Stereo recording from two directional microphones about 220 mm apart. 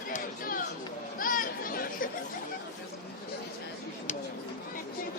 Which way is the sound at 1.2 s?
40° left (ahead or behind).